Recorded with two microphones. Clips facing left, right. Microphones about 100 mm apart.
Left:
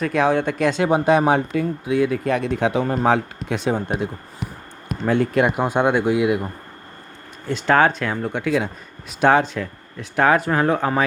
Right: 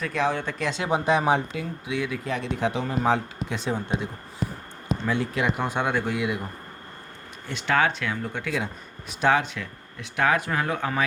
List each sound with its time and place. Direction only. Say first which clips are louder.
0.0 s speech: left 7 dB; 55° left (ahead or behind)
7.4 s speech: left 7 dB; 40° left (ahead or behind)
8.3 s speech: left 8 dB; 55° left (ahead or behind)
9.3 s speech: left 6 dB; 40° left (ahead or behind)